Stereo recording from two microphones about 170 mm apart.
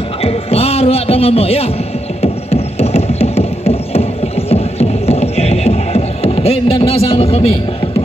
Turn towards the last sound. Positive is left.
turn(degrees=35)  # may be behind; listen again after turning